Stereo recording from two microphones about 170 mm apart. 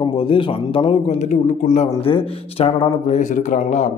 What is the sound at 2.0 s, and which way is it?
A man's voice, 30° left (ahead or behind).